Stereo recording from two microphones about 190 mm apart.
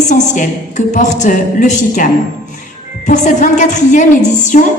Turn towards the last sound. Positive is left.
turn(degrees=40)  # may be behind; listen again after turning